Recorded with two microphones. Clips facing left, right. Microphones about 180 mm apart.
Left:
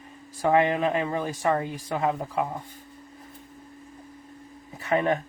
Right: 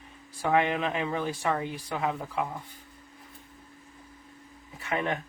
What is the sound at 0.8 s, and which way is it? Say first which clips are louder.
Speech: left 4 dB; 45° left (ahead or behind).